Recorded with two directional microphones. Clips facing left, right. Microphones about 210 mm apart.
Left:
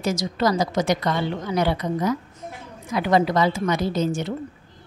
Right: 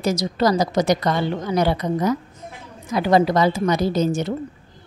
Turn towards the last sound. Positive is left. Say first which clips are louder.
# right 3 dB
turn(degrees=-40)  # may be behind; listen again after turning